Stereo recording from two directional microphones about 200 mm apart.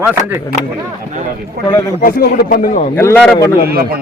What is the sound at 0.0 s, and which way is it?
Speech, 10° right (ahead or behind).